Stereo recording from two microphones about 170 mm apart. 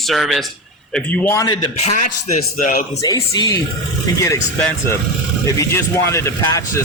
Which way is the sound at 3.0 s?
20° left (ahead or behind).